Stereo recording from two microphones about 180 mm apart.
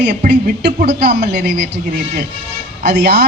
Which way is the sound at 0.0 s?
65° right (ahead or behind).